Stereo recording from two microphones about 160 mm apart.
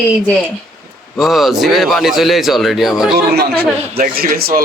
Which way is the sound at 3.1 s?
80° right.